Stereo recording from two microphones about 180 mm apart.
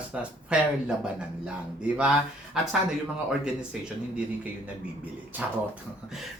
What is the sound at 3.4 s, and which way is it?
Speech, 5° right (ahead or behind).